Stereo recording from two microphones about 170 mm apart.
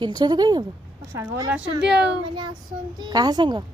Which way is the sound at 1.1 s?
15° right (ahead or behind).